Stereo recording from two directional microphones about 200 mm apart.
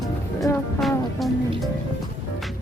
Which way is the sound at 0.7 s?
Centre (ahead or behind).